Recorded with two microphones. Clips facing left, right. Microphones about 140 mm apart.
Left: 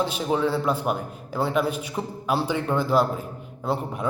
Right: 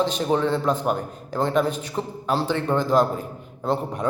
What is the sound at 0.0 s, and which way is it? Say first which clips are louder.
A man's voice: right 2 dB; 10° left (ahead or behind).